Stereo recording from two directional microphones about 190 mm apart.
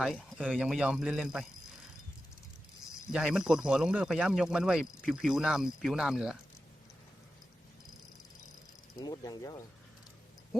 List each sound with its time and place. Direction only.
0.0 s speech: centre (ahead or behind)
3.1 s speech: 5° right (ahead or behind)
9.0 s pulleys: 20° left (ahead or behind)